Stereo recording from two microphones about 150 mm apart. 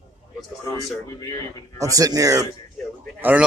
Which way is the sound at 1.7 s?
20° right (ahead or behind).